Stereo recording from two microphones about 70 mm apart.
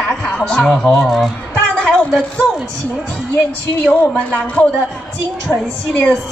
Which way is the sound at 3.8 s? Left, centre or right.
Centre.